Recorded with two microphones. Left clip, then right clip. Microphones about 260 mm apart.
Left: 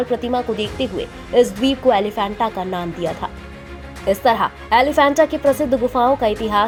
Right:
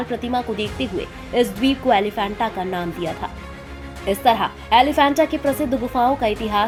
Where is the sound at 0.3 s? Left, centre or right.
Left.